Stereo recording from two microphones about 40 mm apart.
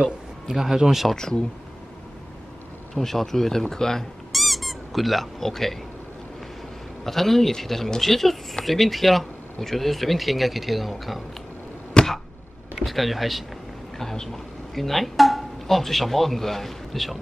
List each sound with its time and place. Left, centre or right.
0.0 s a man's voice: centre
1.1 s speech: centre
2.9 s speech: centre
4.3 s squeak: centre
7.1 s speech: centre
12.0 s a sound: left
12.7 s speech: centre
13.9 s speech: centre